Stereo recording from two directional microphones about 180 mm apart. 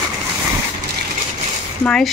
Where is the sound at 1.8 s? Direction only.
Centre (ahead or behind).